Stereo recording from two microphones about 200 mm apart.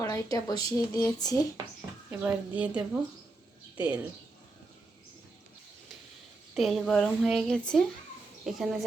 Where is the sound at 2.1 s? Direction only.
5° right (ahead or behind).